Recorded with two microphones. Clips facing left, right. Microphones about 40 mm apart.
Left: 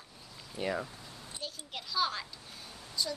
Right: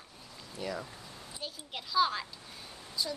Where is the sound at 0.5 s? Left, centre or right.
Left.